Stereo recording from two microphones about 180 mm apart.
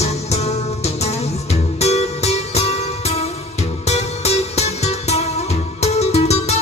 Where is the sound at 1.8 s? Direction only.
35° left (ahead or behind).